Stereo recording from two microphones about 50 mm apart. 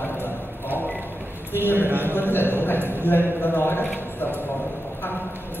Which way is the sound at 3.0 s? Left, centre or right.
Left.